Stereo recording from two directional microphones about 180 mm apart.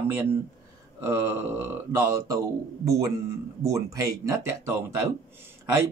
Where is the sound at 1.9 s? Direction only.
15° right (ahead or behind).